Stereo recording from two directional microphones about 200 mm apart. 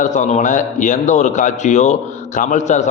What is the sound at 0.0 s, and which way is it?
A man's voice, 35° left (ahead or behind).